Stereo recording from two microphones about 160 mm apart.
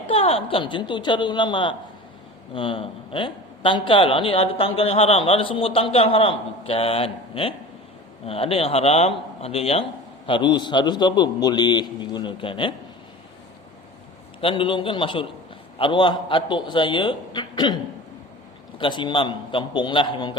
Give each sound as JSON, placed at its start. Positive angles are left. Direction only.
{"t": 0.1, "sound": "a man's voice", "side_deg": 35}
{"t": 14.4, "sound": "speech", "side_deg": 30}
{"t": 18.8, "sound": "speech", "side_deg": 30}